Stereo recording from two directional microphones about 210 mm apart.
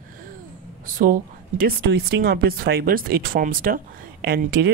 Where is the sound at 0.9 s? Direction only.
40° right (ahead or behind).